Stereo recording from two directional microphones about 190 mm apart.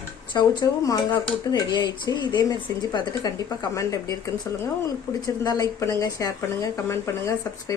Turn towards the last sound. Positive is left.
turn(degrees=15)  # may be behind; listen again after turning